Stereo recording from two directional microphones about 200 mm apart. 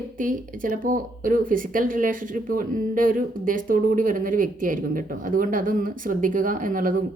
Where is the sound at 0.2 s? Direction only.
40° right (ahead or behind).